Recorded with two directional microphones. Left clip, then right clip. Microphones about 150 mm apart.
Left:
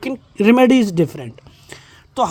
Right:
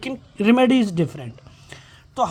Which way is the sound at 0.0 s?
40° left (ahead or behind).